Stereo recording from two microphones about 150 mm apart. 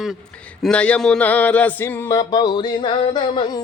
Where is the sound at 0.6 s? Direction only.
5° left (ahead or behind).